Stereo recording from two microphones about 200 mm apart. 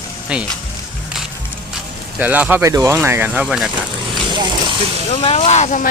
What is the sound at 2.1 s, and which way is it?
Speech, 10° right (ahead or behind).